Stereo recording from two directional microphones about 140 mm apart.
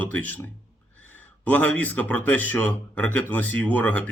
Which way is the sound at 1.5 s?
10° left (ahead or behind).